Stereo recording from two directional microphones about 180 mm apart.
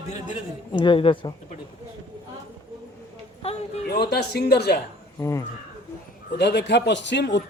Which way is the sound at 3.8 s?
65° left (ahead or behind).